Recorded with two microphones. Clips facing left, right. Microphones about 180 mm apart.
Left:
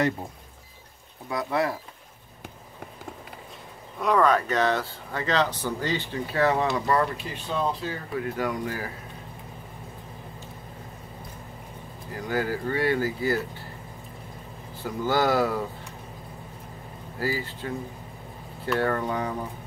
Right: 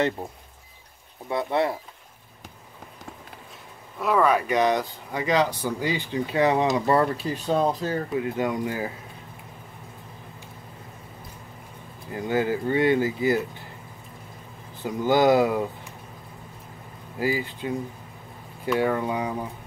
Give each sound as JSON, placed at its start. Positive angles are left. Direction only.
{"t": 1.3, "sound": "speech", "side_deg": -25}
{"t": 4.0, "sound": "speech", "side_deg": -5}
{"t": 6.9, "sound": "speech", "side_deg": -35}
{"t": 8.1, "sound": "speech", "side_deg": -20}
{"t": 12.1, "sound": "speech", "side_deg": -20}
{"t": 14.8, "sound": "speech", "side_deg": -20}
{"t": 17.2, "sound": "speech", "side_deg": -15}